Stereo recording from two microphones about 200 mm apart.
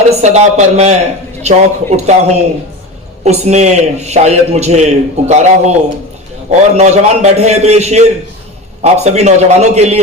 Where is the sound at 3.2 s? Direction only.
35° right (ahead or behind).